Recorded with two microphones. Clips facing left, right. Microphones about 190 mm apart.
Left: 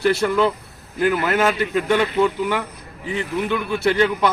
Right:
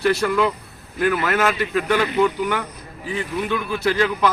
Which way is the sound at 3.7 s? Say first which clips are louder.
Left 2 dB; 25° left (ahead or behind).